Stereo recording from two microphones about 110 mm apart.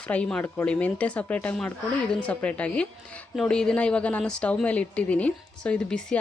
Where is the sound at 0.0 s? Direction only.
10° left (ahead or behind).